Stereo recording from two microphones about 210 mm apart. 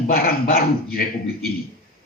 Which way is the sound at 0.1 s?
45° left (ahead or behind).